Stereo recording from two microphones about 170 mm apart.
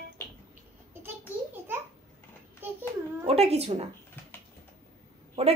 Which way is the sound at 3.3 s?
35° right (ahead or behind).